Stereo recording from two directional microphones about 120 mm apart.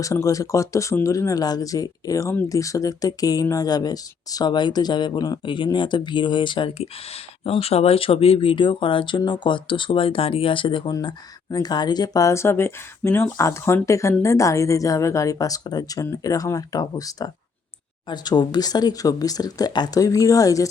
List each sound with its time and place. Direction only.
0.0 s speech: 25° left (ahead or behind)
7.4 s speech: 55° left (ahead or behind); by 20.7 s 30° left (ahead or behind)